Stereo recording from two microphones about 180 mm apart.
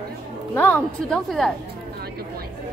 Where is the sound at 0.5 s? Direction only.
10° left (ahead or behind).